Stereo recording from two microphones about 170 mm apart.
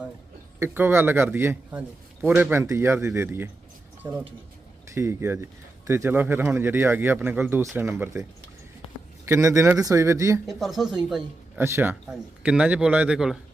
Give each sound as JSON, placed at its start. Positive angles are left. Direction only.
{"t": 0.6, "sound": "speech", "side_deg": -15}
{"t": 4.9, "sound": "speech", "side_deg": -15}
{"t": 10.4, "sound": "speech", "side_deg": 0}